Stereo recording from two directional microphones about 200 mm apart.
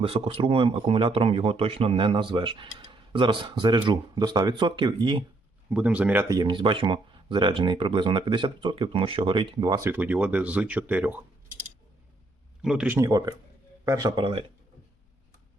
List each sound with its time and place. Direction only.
0.0 s speech: 30° right (ahead or behind)
5.6 s speech: 5° right (ahead or behind)
12.6 s speech: 5° right (ahead or behind)
13.0 s speech: 15° right (ahead or behind)